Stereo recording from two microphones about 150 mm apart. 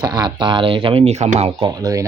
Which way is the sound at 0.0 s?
30° right (ahead or behind).